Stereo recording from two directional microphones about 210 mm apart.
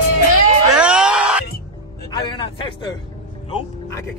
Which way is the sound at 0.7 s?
5° right (ahead or behind).